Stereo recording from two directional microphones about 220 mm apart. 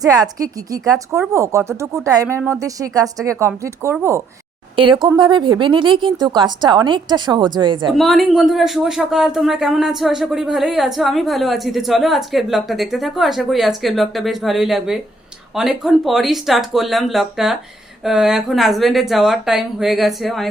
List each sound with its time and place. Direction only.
0.0 s speech: 15° right (ahead or behind)
7.9 s speech: centre (ahead or behind)